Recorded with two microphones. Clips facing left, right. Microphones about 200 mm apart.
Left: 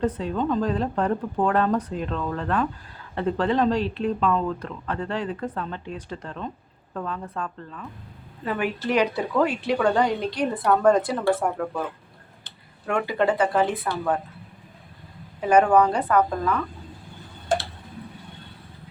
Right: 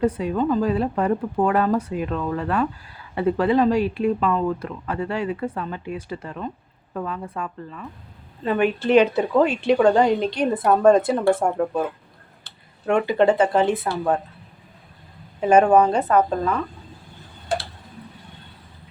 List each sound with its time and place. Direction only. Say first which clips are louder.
0.0 s speech: right 3 dB; 10° right (ahead or behind)
8.4 s a woman's voice: right 6 dB; 25° right (ahead or behind)
12.9 s a woman's voice: right 5 dB; 25° right (ahead or behind)
15.4 s a woman's voice: right 3 dB; 25° right (ahead or behind)